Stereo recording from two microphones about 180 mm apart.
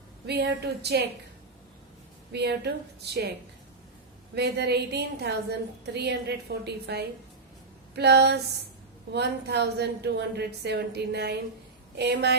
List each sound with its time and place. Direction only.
0.3 s a woman's voice: 70° right (ahead or behind)
2.3 s a woman's voice: 65° right (ahead or behind)
4.4 s a woman's voice: 65° right (ahead or behind)